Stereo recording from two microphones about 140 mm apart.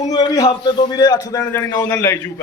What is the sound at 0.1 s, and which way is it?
A man's voice, 25° left (ahead or behind).